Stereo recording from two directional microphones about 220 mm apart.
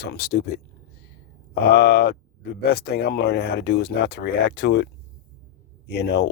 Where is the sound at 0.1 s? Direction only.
50° left (ahead or behind).